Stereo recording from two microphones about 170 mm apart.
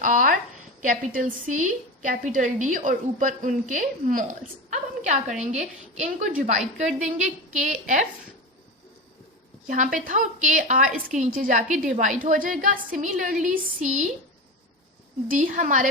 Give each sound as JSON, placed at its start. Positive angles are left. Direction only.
{"t": 0.0, "sound": "a woman's voice", "side_deg": -50}
{"t": 4.7, "sound": "a sound", "side_deg": -45}
{"t": 5.5, "sound": "a woman's voice", "side_deg": -45}
{"t": 9.6, "sound": "a woman's voice", "side_deg": -50}
{"t": 15.3, "sound": "a woman's voice", "side_deg": -50}